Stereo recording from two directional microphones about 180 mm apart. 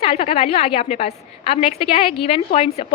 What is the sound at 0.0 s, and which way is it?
A woman's voice, 30° left (ahead or behind).